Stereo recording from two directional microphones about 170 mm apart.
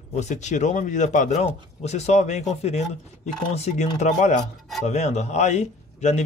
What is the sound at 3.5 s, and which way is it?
Speech, 40° left (ahead or behind).